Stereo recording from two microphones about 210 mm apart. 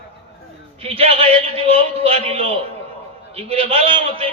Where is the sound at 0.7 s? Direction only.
30° right (ahead or behind).